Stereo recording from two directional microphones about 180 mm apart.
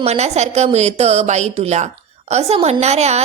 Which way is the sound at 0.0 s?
35° right (ahead or behind).